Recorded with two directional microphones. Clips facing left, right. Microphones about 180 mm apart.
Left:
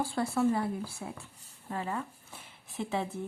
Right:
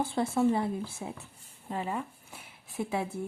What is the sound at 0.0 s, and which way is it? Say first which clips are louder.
Speech: right 2 dB; 20° right (ahead or behind).